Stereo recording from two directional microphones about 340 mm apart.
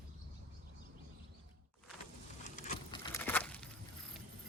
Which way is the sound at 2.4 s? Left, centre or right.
Left.